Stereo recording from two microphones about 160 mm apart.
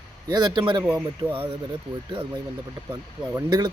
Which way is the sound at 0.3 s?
25° right (ahead or behind).